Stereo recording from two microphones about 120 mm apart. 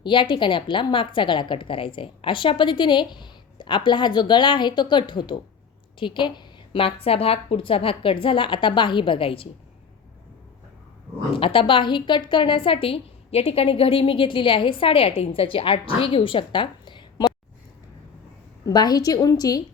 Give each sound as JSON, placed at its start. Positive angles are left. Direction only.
{"t": 0.0, "sound": "a woman's voice", "side_deg": 40}
{"t": 11.3, "sound": "a woman's voice", "side_deg": 45}
{"t": 18.6, "sound": "a woman's voice", "side_deg": 35}